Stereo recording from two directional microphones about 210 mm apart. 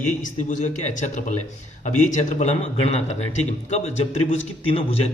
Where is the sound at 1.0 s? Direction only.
35° left (ahead or behind).